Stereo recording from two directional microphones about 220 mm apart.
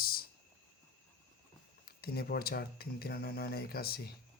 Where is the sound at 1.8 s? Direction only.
45° left (ahead or behind).